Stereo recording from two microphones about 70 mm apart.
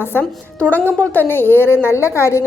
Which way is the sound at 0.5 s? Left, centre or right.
Centre.